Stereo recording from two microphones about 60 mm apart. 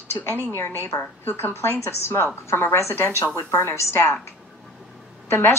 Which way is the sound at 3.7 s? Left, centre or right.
Left.